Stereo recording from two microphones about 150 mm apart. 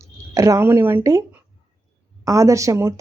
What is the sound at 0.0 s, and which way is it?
A woman's voice, 20° right (ahead or behind).